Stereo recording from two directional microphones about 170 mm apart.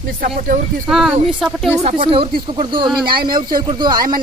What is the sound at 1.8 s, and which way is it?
Speech, 35° right (ahead or behind).